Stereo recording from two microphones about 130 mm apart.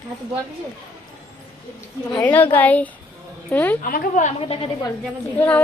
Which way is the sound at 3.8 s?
80° left.